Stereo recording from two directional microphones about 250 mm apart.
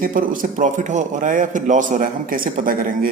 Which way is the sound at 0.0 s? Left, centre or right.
Right.